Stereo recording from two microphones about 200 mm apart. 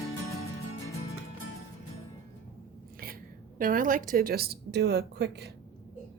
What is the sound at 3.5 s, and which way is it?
A woman's voice, 45° right (ahead or behind).